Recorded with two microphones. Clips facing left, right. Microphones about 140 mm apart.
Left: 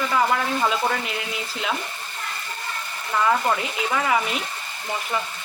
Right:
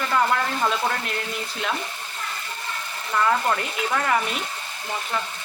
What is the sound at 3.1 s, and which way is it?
Speech, 5° left (ahead or behind).